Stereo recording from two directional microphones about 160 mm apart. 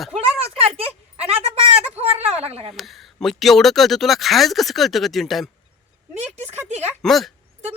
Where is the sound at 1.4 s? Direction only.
40° right (ahead or behind).